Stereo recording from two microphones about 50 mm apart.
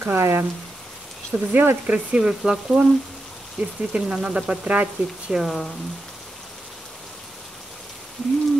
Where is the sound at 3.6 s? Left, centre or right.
Right.